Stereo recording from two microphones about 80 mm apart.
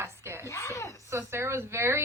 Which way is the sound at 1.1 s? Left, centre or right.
Right.